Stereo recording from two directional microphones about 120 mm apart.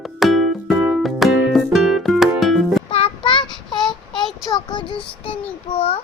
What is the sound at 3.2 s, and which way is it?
Child singing, 40° left (ahead or behind).